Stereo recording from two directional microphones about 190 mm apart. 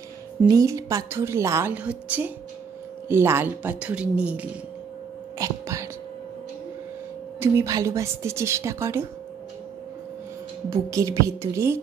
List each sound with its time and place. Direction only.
0.5 s a woman's voice: 15° right (ahead or behind)
5.4 s whispering: 15° right (ahead or behind)
7.3 s a woman's voice: 15° right (ahead or behind)
10.7 s a woman's voice: 15° right (ahead or behind)